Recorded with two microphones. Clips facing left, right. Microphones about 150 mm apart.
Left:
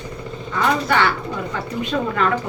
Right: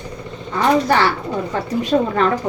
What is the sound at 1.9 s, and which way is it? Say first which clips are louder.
Speech: right 6 dB; 35° right (ahead or behind).